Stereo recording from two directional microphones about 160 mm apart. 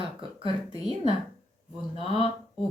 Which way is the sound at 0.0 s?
35° right (ahead or behind).